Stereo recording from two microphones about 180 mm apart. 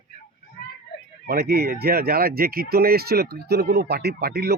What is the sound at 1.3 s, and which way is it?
Speech, 60° right (ahead or behind).